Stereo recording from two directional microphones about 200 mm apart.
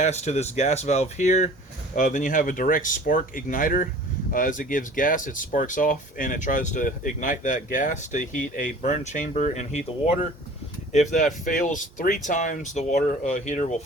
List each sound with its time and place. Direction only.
0.0 s speech: 35° left (ahead or behind)
10.9 s speech: 40° left (ahead or behind)